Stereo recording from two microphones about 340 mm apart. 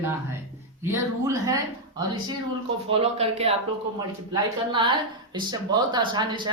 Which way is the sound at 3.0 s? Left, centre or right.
Centre.